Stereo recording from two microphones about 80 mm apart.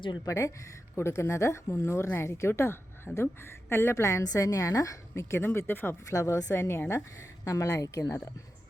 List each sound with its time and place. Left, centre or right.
0.3 s a woman's voice: left
3.7 s a woman's voice: left
6.1 s a woman's voice: left
7.4 s speech: left